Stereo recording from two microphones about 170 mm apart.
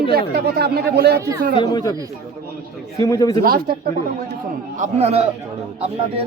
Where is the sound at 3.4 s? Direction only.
60° right (ahead or behind).